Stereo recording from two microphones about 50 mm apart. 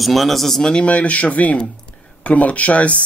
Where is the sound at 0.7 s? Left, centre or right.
Left.